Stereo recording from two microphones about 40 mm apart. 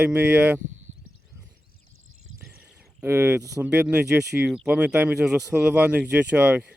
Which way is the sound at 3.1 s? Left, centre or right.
Right.